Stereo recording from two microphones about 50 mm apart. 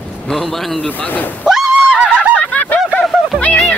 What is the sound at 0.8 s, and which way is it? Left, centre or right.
Speech, left.